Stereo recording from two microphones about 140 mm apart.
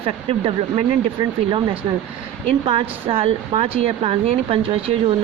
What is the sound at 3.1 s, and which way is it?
Speech, 40° right (ahead or behind).